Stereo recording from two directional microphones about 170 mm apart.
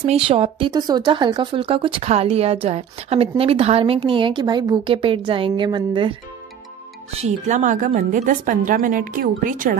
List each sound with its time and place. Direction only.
0.0 s speech: 35° right (ahead or behind)
7.1 s a woman's voice: 40° right (ahead or behind)